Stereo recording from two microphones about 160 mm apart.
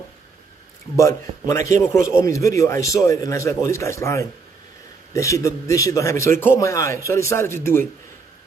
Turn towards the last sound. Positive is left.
turn(degrees=15)  # may be behind; listen again after turning